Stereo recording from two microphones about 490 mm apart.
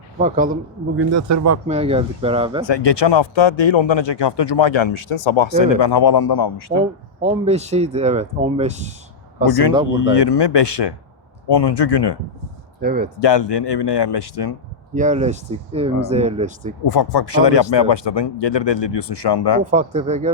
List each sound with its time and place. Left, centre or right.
0.2 s speech: centre
0.9 s a man's voice: right
1.6 s speech: centre
2.6 s speech: left
7.2 s speech: centre
9.5 s speech: left
12.8 s speech: centre
13.1 s speech: left
14.9 s speech: centre
16.8 s speech: left
19.7 s speech: centre